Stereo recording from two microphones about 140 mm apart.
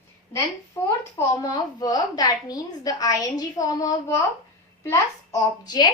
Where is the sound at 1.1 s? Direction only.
25° left (ahead or behind).